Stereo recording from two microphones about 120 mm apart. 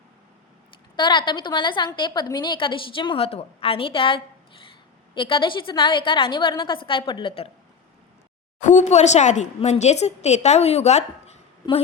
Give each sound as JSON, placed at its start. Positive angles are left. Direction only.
{"t": 0.9, "sound": "a woman's voice", "side_deg": 40}
{"t": 8.6, "sound": "a woman's voice", "side_deg": 85}